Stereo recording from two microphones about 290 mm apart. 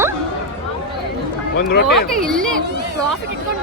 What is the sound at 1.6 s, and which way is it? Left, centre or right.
Speech, left.